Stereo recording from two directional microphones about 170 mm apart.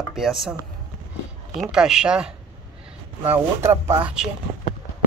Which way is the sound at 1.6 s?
5° right (ahead or behind).